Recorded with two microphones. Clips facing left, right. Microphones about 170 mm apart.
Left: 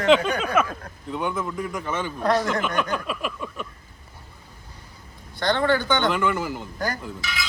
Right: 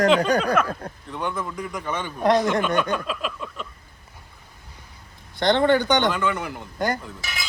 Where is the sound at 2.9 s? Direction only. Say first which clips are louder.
Right 1 dB; 5° left (ahead or behind).